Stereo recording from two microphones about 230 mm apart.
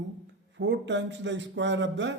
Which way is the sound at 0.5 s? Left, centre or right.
Right.